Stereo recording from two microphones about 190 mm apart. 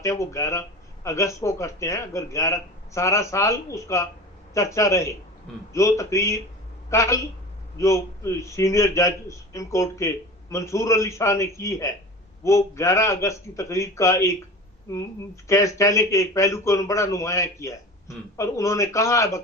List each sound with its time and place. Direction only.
0.0 s speech: 15° left (ahead or behind)
15.4 s speech: 15° left (ahead or behind)